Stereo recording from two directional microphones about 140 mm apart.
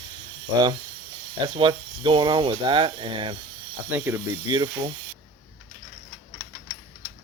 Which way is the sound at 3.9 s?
10° right (ahead or behind).